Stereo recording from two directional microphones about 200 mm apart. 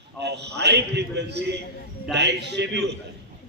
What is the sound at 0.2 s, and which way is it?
A man's voice, 60° right (ahead or behind).